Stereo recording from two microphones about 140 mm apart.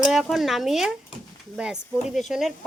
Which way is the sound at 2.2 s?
Centre (ahead or behind).